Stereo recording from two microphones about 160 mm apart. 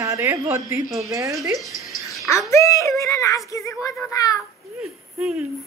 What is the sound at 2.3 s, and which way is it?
A child's voice, 20° left (ahead or behind).